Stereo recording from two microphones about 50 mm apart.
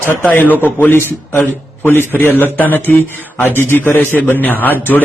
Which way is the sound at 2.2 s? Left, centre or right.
Left.